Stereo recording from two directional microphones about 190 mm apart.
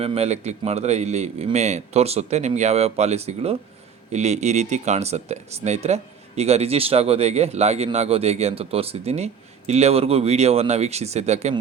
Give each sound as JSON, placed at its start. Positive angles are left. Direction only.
{"t": 0.0, "sound": "speech", "side_deg": -30}